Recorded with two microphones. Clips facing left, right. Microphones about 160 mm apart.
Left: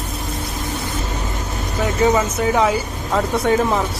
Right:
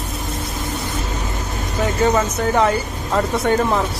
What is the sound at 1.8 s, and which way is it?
Speech, 5° left (ahead or behind).